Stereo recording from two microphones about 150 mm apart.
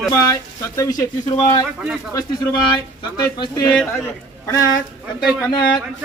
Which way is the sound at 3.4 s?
30° left (ahead or behind).